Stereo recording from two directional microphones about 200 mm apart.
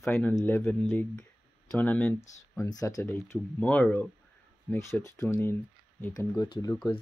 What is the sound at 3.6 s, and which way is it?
Speech, 5° left (ahead or behind).